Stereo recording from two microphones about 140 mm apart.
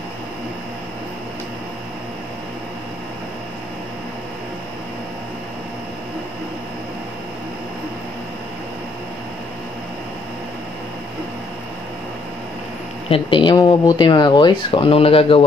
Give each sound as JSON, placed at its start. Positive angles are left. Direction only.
{"t": 13.1, "sound": "speech", "side_deg": 35}